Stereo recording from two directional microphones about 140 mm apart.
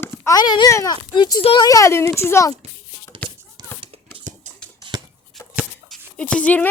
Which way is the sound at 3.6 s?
25° right (ahead or behind).